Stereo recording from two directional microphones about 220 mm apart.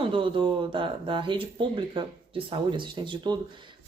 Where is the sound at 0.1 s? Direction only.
25° right (ahead or behind).